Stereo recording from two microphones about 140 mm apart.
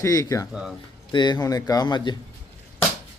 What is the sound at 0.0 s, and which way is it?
A man's voice, 25° left (ahead or behind).